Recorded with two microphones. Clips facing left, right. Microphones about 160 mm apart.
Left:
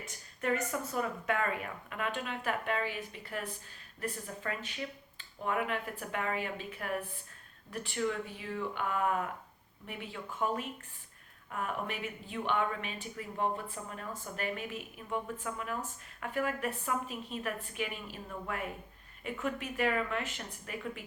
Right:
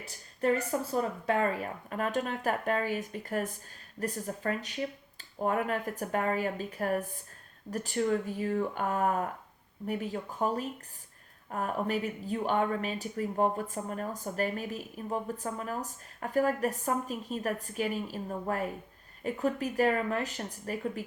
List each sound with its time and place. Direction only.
0.0 s speech: 35° right (ahead or behind)